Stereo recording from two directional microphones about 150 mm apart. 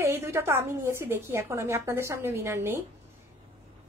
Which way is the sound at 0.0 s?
15° right (ahead or behind).